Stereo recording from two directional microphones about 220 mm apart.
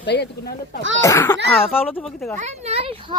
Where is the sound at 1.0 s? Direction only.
15° left (ahead or behind).